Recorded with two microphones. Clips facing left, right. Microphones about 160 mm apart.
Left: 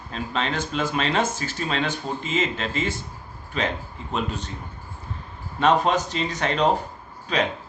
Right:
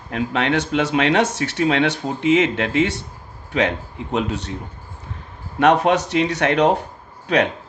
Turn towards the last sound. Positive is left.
turn(degrees=-65)  # may be behind; listen again after turning